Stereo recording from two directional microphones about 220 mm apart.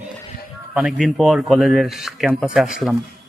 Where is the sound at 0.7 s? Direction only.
5° right (ahead or behind).